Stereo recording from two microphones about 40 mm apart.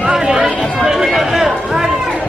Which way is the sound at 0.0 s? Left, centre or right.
Centre.